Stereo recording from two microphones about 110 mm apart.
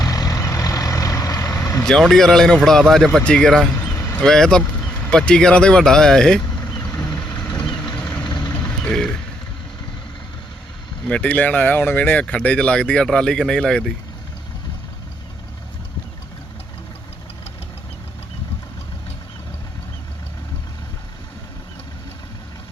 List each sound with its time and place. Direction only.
0.0 s vehicle: 35° left (ahead or behind)
1.8 s speech: 5° left (ahead or behind)
3.8 s vehicle: 20° left (ahead or behind)
4.2 s vehicle: 5° left (ahead or behind)
11.0 s speech: 10° left (ahead or behind)